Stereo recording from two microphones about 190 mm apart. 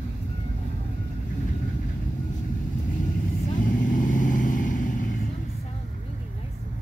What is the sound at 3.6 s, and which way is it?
Vehicle, 45° left (ahead or behind).